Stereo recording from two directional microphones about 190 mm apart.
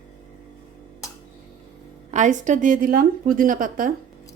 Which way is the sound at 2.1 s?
40° right (ahead or behind).